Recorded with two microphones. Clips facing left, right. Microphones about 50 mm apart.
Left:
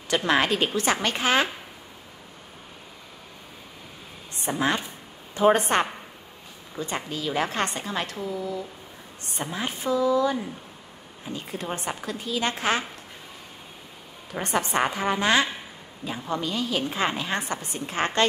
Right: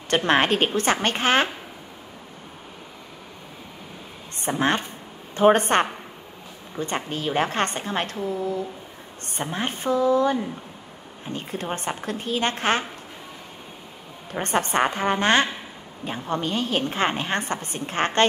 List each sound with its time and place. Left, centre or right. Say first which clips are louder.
0.1 s a woman's voice: right 3 dB; right
4.4 s a woman's voice: right 2 dB; right
14.4 s a woman's voice: right 2 dB; right